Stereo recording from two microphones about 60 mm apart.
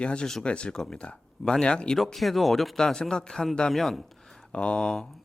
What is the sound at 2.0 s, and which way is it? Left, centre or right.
Speech, centre.